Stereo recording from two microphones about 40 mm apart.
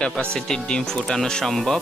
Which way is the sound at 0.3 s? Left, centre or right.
Left.